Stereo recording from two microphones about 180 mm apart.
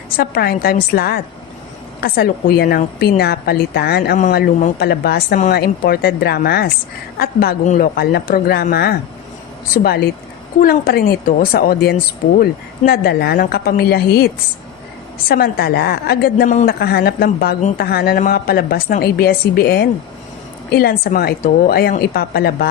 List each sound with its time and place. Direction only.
0.2 s a woman's voice: 60° left (ahead or behind)
7.6 s speech: 40° left (ahead or behind)
7.9 s a woman's voice: 60° left (ahead or behind)
15.3 s a woman's voice: 60° left (ahead or behind)